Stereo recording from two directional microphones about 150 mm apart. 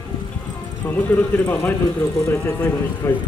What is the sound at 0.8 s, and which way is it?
Speech, 10° left (ahead or behind).